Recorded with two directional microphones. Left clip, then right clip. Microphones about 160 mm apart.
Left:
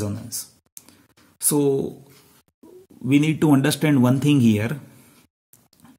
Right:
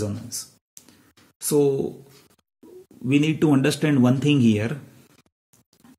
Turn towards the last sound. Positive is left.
turn(degrees=30)  # may be behind; listen again after turning